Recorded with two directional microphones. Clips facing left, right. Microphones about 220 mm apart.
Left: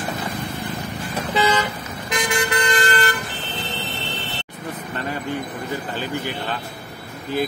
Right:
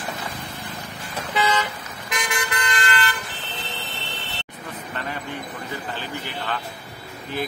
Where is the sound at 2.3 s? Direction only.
30° left (ahead or behind).